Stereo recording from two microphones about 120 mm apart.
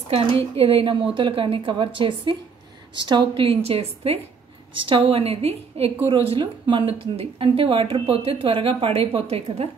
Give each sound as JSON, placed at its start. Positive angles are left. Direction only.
{"t": 0.1, "sound": "a woman's voice", "side_deg": -50}